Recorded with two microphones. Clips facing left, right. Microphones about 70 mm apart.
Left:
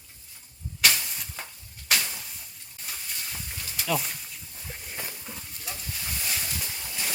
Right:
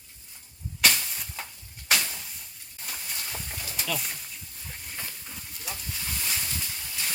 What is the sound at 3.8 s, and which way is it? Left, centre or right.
Speech, centre.